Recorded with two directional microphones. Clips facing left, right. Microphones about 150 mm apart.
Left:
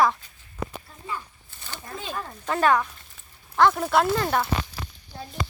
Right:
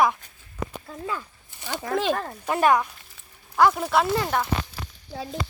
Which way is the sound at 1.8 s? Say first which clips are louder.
Right 10 dB; 90° right.